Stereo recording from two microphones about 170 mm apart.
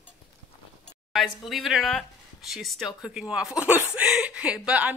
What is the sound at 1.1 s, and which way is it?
Speech, centre (ahead or behind).